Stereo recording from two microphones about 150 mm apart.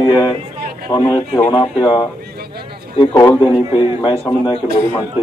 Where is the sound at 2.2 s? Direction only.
90° right.